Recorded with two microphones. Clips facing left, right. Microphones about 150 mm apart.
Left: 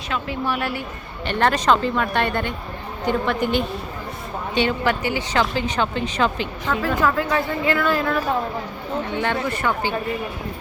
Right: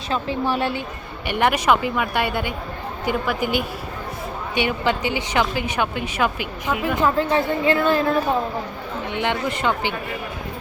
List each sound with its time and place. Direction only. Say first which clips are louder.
0.1 s speech: right 2 dB; 30° right (ahead or behind)
1.3 s speech: even; 10° right (ahead or behind)